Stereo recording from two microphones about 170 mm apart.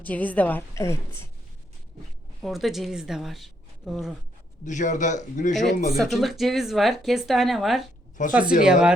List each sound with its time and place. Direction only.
0.0 s a woman's voice: 10° left (ahead or behind)
2.4 s a woman's voice: centre (ahead or behind)
4.6 s a man's voice: 45° left (ahead or behind)
5.9 s speech: centre (ahead or behind)